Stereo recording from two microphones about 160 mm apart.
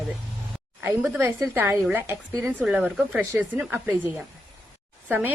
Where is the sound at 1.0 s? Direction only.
5° right (ahead or behind).